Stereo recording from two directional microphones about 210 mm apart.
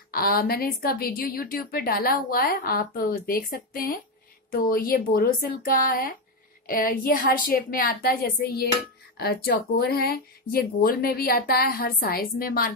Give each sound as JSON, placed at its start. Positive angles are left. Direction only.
{"t": 0.1, "sound": "a woman's voice", "side_deg": 45}